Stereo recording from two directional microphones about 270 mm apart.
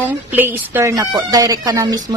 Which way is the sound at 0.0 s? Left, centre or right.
Centre.